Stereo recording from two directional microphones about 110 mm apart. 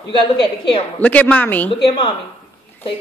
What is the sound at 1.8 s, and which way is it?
Speech, 50° left (ahead or behind).